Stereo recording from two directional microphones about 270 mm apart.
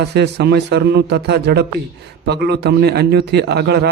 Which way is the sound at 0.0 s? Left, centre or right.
Right.